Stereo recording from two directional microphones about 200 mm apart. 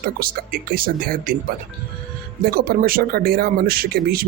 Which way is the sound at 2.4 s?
50° right (ahead or behind).